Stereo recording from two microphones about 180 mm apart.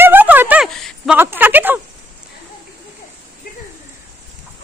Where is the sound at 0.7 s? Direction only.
Centre (ahead or behind).